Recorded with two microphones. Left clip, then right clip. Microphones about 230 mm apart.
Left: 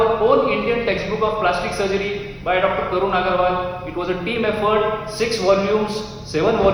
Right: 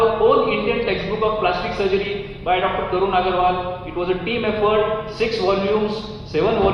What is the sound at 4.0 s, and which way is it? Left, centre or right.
A man's voice, left.